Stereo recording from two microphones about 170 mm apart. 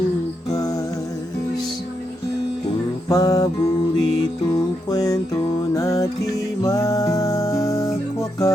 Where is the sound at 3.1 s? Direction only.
20° left (ahead or behind).